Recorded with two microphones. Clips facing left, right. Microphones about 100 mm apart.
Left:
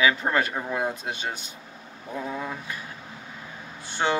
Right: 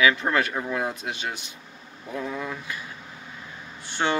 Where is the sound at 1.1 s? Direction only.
30° left (ahead or behind).